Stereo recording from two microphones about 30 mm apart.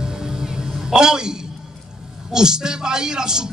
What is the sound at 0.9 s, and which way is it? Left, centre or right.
Speech, right.